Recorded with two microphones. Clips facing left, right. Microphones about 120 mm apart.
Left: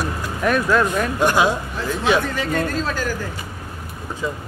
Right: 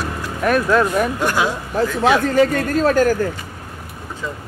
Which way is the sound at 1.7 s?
45° right (ahead or behind).